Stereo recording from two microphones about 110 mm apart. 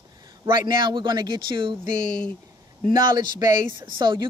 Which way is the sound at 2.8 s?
40° right (ahead or behind).